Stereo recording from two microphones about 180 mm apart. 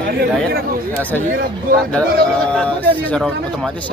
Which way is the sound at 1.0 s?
10° left (ahead or behind).